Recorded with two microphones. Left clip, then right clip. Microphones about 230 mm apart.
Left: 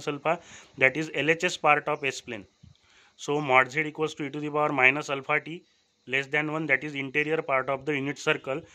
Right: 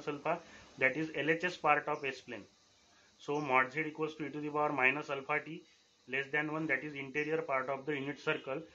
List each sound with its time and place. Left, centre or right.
0.0 s a man's voice: left